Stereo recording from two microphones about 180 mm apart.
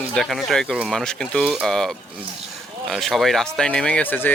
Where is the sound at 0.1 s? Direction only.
Centre (ahead or behind).